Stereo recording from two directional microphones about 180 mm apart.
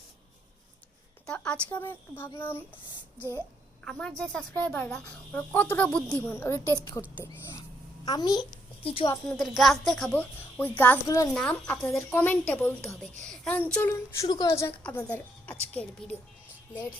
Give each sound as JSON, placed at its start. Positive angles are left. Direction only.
{"t": 1.3, "sound": "a woman's voice", "side_deg": 5}
{"t": 3.8, "sound": "a woman's voice", "side_deg": 5}
{"t": 8.0, "sound": "a child's voice", "side_deg": 20}
{"t": 9.3, "sound": "speech", "side_deg": 0}
{"t": 11.3, "sound": "a woman's voice", "side_deg": 5}
{"t": 13.9, "sound": "a woman's voice", "side_deg": 20}